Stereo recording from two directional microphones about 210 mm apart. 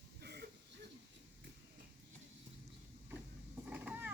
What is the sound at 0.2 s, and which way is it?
Throat clearing, 50° right (ahead or behind).